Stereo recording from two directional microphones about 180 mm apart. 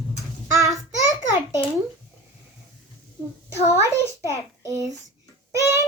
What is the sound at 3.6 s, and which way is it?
A child's voice, 15° right (ahead or behind).